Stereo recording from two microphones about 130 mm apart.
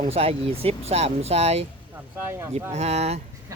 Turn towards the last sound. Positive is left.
turn(degrees=-55)  # may be behind; listen again after turning